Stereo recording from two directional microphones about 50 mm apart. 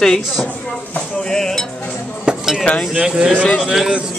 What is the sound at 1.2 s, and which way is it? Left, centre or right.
Cutlery, centre.